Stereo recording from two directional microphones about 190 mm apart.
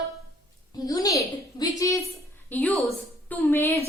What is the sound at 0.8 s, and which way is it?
A woman's voice, 20° left (ahead or behind).